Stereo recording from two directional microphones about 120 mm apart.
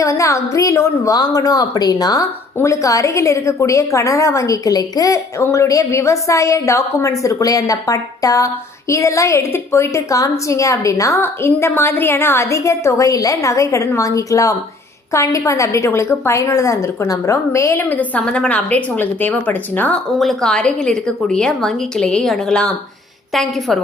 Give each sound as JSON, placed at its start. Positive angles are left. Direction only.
{"t": 0.0, "sound": "a woman's voice", "side_deg": 25}
{"t": 20.1, "sound": "a woman's voice", "side_deg": 5}